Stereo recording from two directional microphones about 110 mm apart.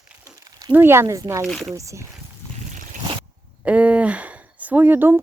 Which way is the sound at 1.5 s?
5° left (ahead or behind).